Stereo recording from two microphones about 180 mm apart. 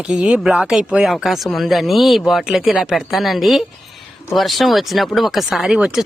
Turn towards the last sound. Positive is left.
turn(degrees=-5)  # may be behind; listen again after turning